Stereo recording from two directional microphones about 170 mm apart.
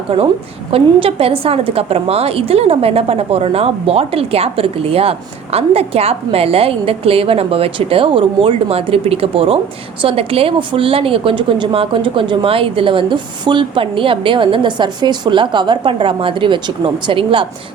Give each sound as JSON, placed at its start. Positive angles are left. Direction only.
{"t": 0.1, "sound": "a woman's voice", "side_deg": -35}